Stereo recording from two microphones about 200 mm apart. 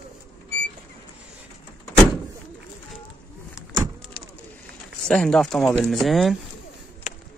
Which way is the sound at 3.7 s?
20° right (ahead or behind).